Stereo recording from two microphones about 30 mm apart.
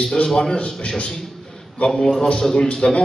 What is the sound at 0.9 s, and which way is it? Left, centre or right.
Speech, left.